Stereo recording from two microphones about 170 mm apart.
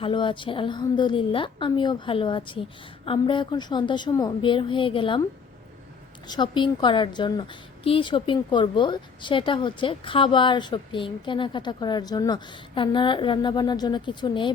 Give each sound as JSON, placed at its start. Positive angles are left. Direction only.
{"t": 0.0, "sound": "a woman's voice", "side_deg": 30}
{"t": 6.2, "sound": "a woman's voice", "side_deg": 25}